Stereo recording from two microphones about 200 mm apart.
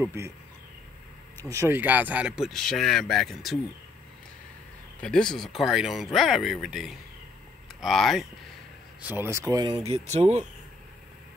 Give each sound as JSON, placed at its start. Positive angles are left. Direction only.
{"t": 0.0, "sound": "speech", "side_deg": -15}
{"t": 1.4, "sound": "speech", "side_deg": -15}
{"t": 5.0, "sound": "speech", "side_deg": 5}
{"t": 9.0, "sound": "speech", "side_deg": -10}
{"t": 9.8, "sound": "speech", "side_deg": -30}